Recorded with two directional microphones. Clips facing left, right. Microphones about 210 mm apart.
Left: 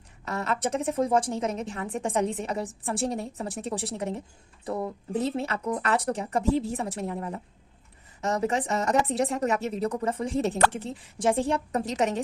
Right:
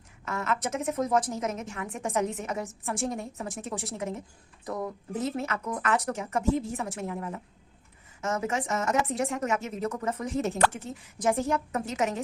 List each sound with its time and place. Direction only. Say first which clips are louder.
0.3 s a woman's voice: left 2 dB; 35° left (ahead or behind)